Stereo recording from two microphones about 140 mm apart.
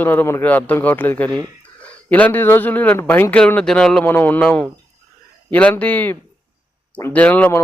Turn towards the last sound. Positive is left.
turn(degrees=10)  # may be behind; listen again after turning